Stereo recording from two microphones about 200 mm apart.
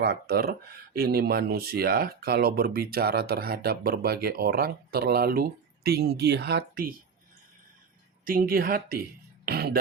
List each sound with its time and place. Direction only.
0.0 s speech: 50° right (ahead or behind)
8.2 s speech: 45° right (ahead or behind)
9.5 s music: 50° right (ahead or behind)